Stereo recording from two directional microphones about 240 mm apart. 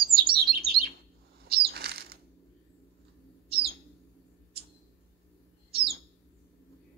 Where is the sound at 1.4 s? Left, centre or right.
Right.